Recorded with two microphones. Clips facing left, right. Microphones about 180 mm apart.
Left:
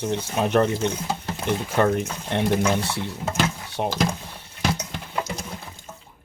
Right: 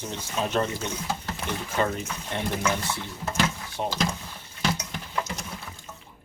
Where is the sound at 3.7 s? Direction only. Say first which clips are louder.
Left 5 dB; 60° left (ahead or behind).